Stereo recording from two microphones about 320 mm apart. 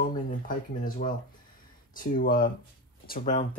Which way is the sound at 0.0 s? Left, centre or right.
Left.